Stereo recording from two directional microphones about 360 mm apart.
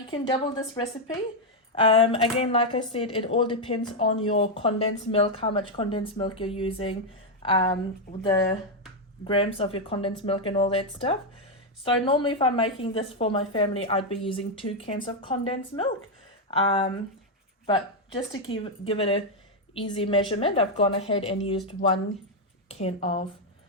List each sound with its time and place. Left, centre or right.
0.1 s a woman's voice: centre
18.4 s a woman's voice: centre
22.7 s a woman's voice: centre